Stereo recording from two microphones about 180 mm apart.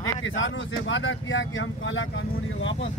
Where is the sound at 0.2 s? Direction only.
90° left.